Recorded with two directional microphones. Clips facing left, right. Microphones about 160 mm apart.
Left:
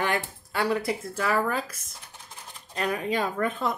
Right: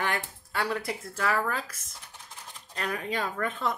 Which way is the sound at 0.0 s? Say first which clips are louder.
Left 4 dB; 15° left (ahead or behind).